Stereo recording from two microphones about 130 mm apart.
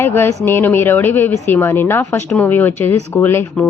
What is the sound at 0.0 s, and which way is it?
A woman's voice, 15° left (ahead or behind).